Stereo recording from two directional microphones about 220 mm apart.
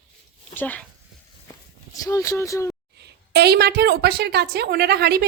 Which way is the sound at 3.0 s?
50° right (ahead or behind).